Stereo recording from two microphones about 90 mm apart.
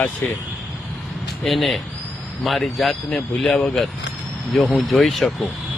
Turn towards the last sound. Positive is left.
turn(degrees=0)  # may be behind; listen again after turning